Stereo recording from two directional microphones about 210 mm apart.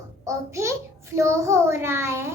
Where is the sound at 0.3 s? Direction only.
15° right (ahead or behind).